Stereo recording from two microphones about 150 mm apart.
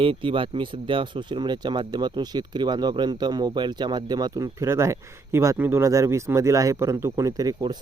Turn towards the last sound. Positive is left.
turn(degrees=-25)  # may be behind; listen again after turning